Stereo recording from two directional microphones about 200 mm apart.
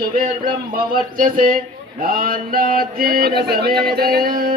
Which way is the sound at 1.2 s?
45° right (ahead or behind).